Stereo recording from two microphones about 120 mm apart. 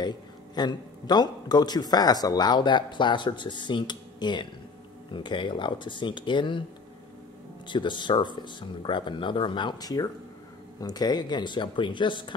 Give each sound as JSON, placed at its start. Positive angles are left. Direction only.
{"t": 0.6, "sound": "a man's voice", "side_deg": 35}
{"t": 7.6, "sound": "a man's voice", "side_deg": 40}